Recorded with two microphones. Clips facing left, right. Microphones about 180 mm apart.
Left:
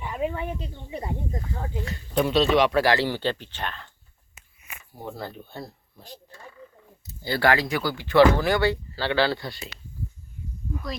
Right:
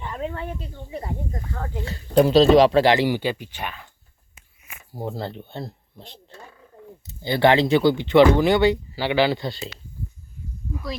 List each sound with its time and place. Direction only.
0.0 s speech: 10° left (ahead or behind)
1.8 s speech: 35° right (ahead or behind); by 3.8 s 10° right (ahead or behind)
4.9 s speech: 30° right (ahead or behind)
10.7 s speech: centre (ahead or behind)